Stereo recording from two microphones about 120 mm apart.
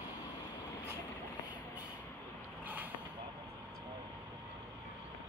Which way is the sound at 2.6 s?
15° right (ahead or behind).